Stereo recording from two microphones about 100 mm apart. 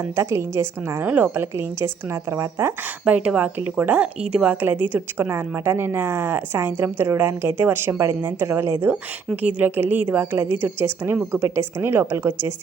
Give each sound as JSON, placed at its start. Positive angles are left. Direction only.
{"t": 0.2, "sound": "speech", "side_deg": -25}
{"t": 3.0, "sound": "speech", "side_deg": -10}